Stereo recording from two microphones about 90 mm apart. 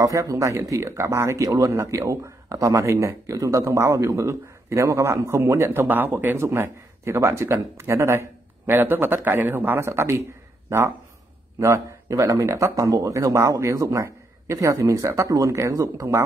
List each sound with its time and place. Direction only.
0.0 s speech: 40° right (ahead or behind)
11.6 s speech: 35° right (ahead or behind)